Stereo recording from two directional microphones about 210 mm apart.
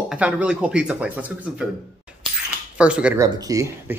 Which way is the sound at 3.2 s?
15° right (ahead or behind).